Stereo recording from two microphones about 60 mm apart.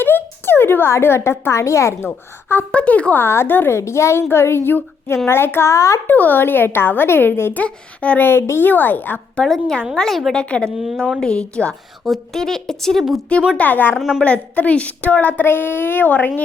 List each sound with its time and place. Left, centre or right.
0.0 s a woman's voice: left
2.0 s speech: left
2.7 s speech: left
3.2 s speech: left
3.8 s a woman's voice: left
6.1 s speech: left
7.5 s speech: left
8.2 s speech: left
9.4 s a woman's voice: centre
10.3 s a woman's voice: centre
10.8 s a woman's voice: centre
11.2 s a woman's voice: centre
12.0 s a woman's voice: centre
13.6 s speech: left